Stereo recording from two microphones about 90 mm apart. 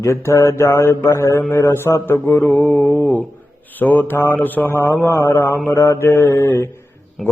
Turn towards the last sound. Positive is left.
turn(degrees=0)  # may be behind; listen again after turning